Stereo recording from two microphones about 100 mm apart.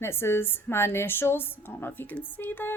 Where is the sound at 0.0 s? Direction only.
25° left (ahead or behind).